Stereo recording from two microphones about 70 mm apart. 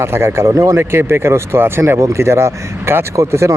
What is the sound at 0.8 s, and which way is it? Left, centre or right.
Speech, right.